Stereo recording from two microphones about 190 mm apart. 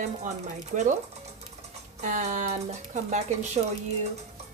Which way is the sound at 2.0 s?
40° right (ahead or behind).